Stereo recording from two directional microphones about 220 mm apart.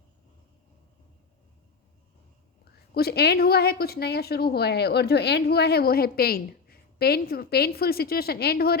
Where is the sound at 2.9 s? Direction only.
45° left (ahead or behind).